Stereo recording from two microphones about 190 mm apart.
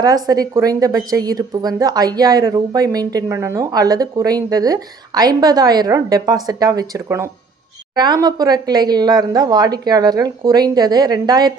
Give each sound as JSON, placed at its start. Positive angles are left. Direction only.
{"t": 0.0, "sound": "a woman's voice", "side_deg": -20}